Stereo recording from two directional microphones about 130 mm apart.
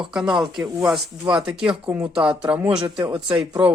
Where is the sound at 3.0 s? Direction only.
40° right (ahead or behind).